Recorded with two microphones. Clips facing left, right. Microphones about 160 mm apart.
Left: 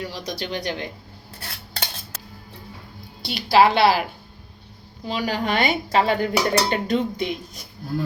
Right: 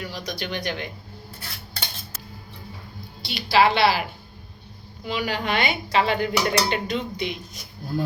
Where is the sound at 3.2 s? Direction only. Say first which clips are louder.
Left 3 dB; 45° left (ahead or behind).